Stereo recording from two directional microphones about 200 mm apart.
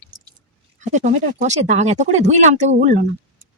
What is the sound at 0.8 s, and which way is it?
Speech, 35° right (ahead or behind).